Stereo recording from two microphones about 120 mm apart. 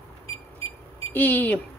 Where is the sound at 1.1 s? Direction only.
15° left (ahead or behind).